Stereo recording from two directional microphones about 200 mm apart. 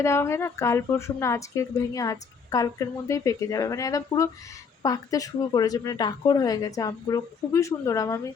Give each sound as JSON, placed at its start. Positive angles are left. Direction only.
{"t": 0.0, "sound": "a woman's voice", "side_deg": 15}